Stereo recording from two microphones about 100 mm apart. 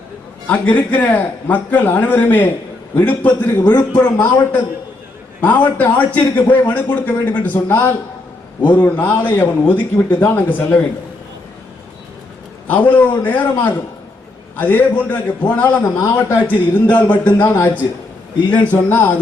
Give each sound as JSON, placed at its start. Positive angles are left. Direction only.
{"t": 0.4, "sound": "a man's voice", "side_deg": 15}
{"t": 12.6, "sound": "a man's voice", "side_deg": 20}
{"t": 15.8, "sound": "a man's voice", "side_deg": 30}
{"t": 16.1, "sound": "a man's voice", "side_deg": 15}